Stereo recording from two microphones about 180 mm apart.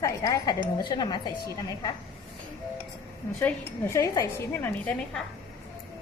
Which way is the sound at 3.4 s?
10° left (ahead or behind).